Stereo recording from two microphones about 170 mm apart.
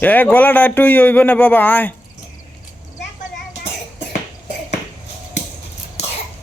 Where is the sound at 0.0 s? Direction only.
10° left (ahead or behind).